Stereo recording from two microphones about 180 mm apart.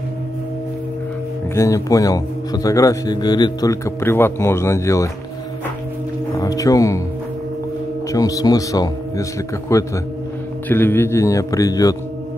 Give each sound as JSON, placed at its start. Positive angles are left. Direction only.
{"t": 1.5, "sound": "a man's voice", "side_deg": 15}
{"t": 6.3, "sound": "foghorn", "side_deg": 20}
{"t": 8.1, "sound": "a man's voice", "side_deg": 20}